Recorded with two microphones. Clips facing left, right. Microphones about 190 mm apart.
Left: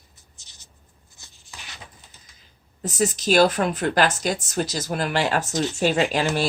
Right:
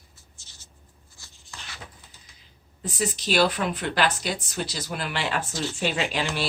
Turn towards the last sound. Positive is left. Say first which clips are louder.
# left 6 dB
turn(degrees=45)  # may be behind; listen again after turning